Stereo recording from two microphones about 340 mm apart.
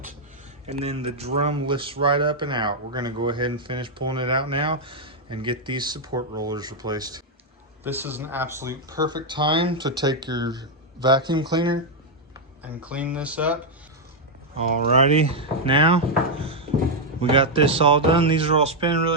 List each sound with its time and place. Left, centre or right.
0.7 s speech: centre
14.9 s speech: centre